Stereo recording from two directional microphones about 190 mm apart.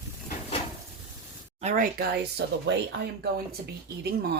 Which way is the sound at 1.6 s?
35° right (ahead or behind).